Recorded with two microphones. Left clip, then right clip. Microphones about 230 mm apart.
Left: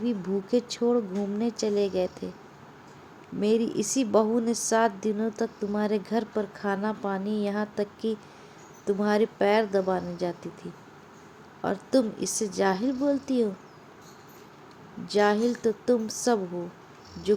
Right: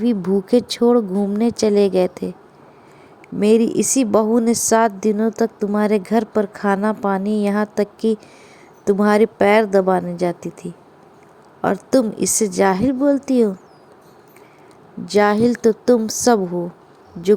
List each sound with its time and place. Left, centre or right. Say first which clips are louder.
0.0 s a woman's voice: right 11 dB; right
3.4 s a woman's voice: right 10 dB; right
15.0 s a woman's voice: right 8 dB; right